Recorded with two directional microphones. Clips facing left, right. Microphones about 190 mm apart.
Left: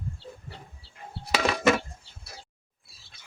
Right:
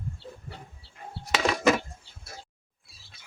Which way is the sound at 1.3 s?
Centre (ahead or behind).